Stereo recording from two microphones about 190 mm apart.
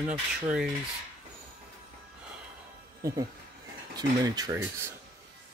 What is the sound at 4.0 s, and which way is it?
Speech, 20° right (ahead or behind).